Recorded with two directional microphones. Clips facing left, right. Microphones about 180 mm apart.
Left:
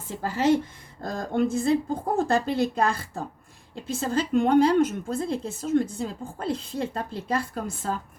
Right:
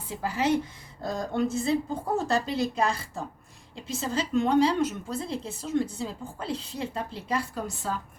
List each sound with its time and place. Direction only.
0.2 s a woman's voice: 45° left (ahead or behind)